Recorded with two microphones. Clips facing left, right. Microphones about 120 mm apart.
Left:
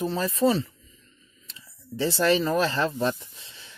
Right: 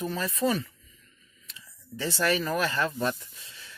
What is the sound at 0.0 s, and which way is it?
Speech, 30° left (ahead or behind).